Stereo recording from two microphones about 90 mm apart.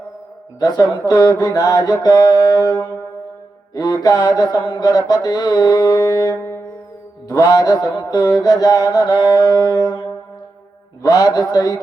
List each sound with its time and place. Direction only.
0.6 s mantra: 50° left (ahead or behind)
2.7 s brass instrument: 25° left (ahead or behind)
3.8 s mantra: 50° left (ahead or behind)
4.6 s speech: 65° left (ahead or behind)
4.9 s mantra: 50° left (ahead or behind)
7.4 s mantra: 45° left (ahead or behind)